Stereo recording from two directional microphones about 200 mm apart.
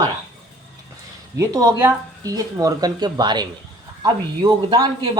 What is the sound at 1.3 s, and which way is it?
Speech, 15° right (ahead or behind).